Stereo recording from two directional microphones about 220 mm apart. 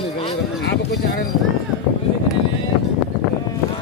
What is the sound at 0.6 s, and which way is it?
Speech, 50° left (ahead or behind).